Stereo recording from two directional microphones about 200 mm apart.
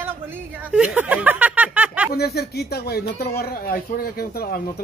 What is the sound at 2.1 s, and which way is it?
Speech, 50° left (ahead or behind).